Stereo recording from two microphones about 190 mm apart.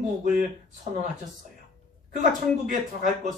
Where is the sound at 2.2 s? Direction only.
45° right (ahead or behind).